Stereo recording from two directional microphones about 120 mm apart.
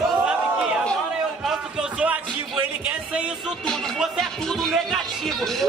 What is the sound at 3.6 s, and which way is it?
Music, 5° left (ahead or behind).